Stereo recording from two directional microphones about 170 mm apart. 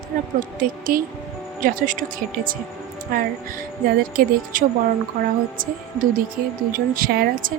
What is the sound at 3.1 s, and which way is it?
A woman's voice, 55° right (ahead or behind).